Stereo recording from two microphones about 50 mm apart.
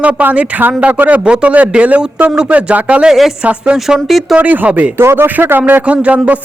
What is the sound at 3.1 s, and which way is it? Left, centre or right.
Speech, centre.